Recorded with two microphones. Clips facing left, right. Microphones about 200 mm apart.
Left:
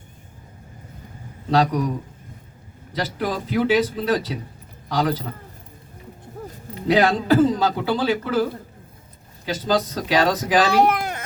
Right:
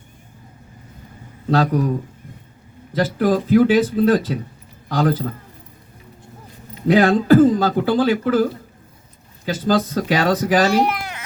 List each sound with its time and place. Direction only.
1.5 s speech: 50° right (ahead or behind)
2.9 s speech: 50° right (ahead or behind)
6.8 s speech: 50° right (ahead or behind)
9.5 s speech: 50° right (ahead or behind)
10.7 s speech: 55° left (ahead or behind)